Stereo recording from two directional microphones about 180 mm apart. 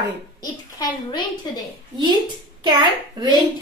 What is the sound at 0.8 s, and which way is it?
Speech, 20° left (ahead or behind).